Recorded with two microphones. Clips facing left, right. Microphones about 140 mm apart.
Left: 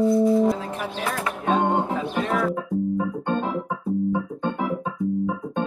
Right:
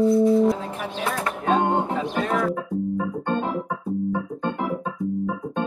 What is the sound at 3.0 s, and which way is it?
Organ, centre (ahead or behind).